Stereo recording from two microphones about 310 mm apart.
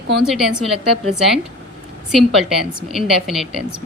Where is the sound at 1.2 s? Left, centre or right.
Centre.